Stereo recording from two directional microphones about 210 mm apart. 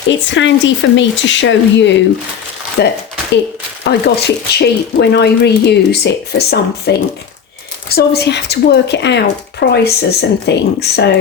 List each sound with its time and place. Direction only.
0.1 s speech: 60° left (ahead or behind)
7.9 s speech: 50° left (ahead or behind)